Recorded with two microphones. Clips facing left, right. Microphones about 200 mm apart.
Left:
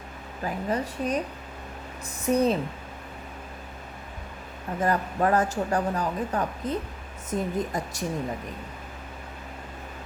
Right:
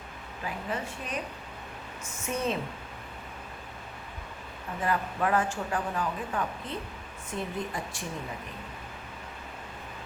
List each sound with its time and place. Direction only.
0.4 s speech: 40° left (ahead or behind)
4.8 s speech: 40° left (ahead or behind)